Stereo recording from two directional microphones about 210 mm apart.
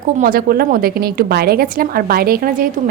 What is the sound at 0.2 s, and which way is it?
A woman's voice, 45° right (ahead or behind).